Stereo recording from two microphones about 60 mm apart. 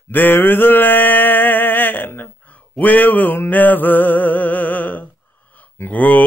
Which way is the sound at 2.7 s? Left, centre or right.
Left.